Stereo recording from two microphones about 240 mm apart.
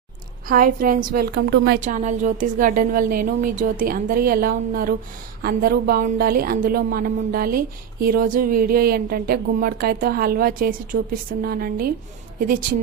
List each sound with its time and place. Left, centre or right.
0.4 s a woman's voice: right